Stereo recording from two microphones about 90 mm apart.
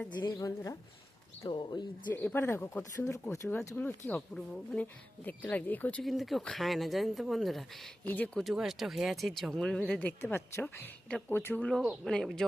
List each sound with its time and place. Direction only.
0.2 s a woman's voice: 50° left (ahead or behind)
1.5 s speech: 55° left (ahead or behind)
2.1 s speech: 25° left (ahead or behind)
2.9 s speech: 35° left (ahead or behind)
3.8 s speech: 20° left (ahead or behind)
4.4 s speech: 10° left (ahead or behind)
5.2 s speech: 20° left (ahead or behind)
6.0 s speech: centre (ahead or behind)
8.0 s speech: 15° left (ahead or behind)
8.5 s speech: 5° right (ahead or behind); by 11.6 s 25° left (ahead or behind)
11.6 s speech: 5° left (ahead or behind)